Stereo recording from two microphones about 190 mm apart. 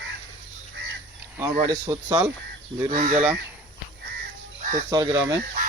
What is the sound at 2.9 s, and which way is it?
Speech, 40° right (ahead or behind).